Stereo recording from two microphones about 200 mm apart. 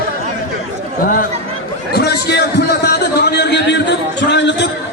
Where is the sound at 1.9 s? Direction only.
55° left (ahead or behind).